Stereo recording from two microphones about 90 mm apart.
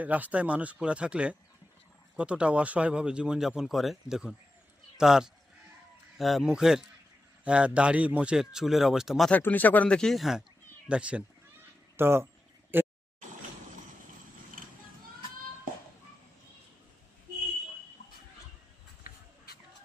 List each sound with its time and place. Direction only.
0.0 s a man's voice: 15° right (ahead or behind)
9.3 s speech: 20° left (ahead or behind); by 10.4 s centre (ahead or behind)
10.8 s speech: 10° right (ahead or behind)
11.9 s speech: 25° right (ahead or behind)
12.7 s a sound: 25° right (ahead or behind)